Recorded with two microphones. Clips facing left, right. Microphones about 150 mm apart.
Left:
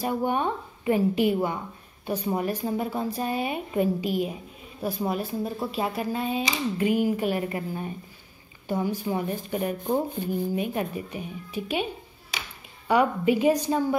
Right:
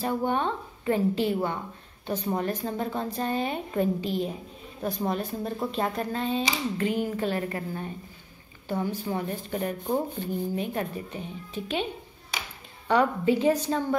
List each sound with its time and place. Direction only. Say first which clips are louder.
0.0 s speech: left 1 dB; 10° left (ahead or behind)